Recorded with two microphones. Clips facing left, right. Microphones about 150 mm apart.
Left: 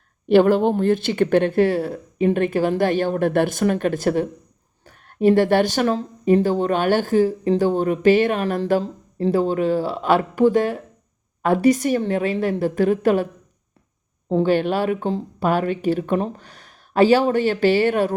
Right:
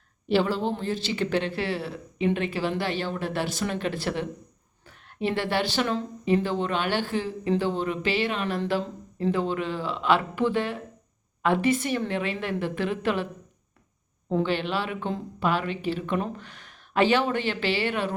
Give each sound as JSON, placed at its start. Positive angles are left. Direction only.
{"t": 0.3, "sound": "a woman's voice", "side_deg": 55}
{"t": 14.3, "sound": "speech", "side_deg": 40}